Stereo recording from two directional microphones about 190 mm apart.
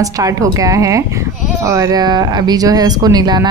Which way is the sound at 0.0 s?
20° right (ahead or behind).